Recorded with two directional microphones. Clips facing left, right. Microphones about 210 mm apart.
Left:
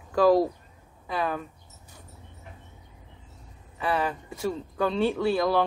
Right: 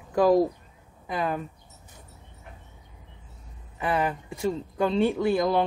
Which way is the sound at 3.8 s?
15° right (ahead or behind).